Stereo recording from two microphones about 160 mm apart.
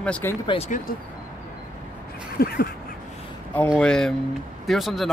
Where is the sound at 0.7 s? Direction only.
50° left (ahead or behind).